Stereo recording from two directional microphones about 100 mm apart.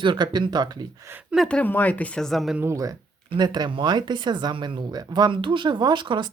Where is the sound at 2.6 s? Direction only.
30° right (ahead or behind).